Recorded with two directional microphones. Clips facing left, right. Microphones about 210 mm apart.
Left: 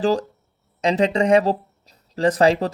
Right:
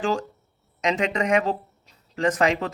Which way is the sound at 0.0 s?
35° left (ahead or behind).